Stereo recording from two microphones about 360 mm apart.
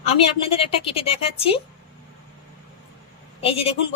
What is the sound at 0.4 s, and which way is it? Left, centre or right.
Speech, centre.